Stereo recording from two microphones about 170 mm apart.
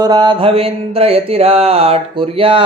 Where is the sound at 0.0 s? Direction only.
25° right (ahead or behind).